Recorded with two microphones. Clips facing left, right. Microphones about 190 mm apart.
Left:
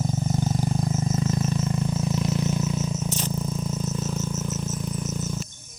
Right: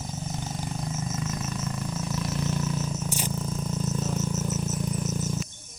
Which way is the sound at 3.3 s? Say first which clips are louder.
Left 2 dB; 5° left (ahead or behind).